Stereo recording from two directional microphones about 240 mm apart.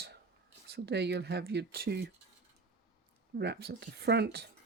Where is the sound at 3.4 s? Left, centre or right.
Right.